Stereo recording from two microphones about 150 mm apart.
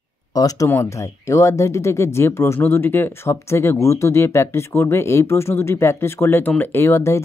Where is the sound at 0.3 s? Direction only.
25° left (ahead or behind).